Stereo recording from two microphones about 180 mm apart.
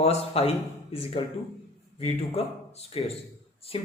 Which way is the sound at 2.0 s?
35° left (ahead or behind).